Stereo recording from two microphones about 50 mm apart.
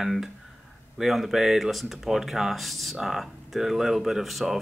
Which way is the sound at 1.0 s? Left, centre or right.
Centre.